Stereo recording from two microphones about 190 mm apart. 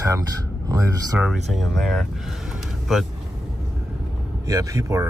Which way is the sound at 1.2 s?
Centre (ahead or behind).